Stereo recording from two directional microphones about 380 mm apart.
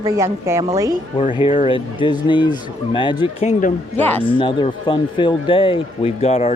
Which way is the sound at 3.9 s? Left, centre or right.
Centre.